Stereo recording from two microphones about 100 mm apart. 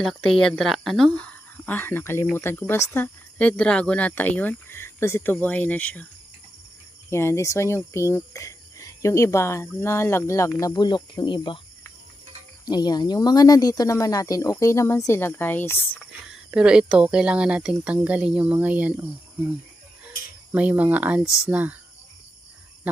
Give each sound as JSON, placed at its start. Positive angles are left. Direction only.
{"t": 0.0, "sound": "speech", "side_deg": 5}
{"t": 3.3, "sound": "speech", "side_deg": 10}
{"t": 7.1, "sound": "speech", "side_deg": 25}
{"t": 10.8, "sound": "speech", "side_deg": 50}
{"t": 12.6, "sound": "speech", "side_deg": 40}
{"t": 16.3, "sound": "speech", "side_deg": -10}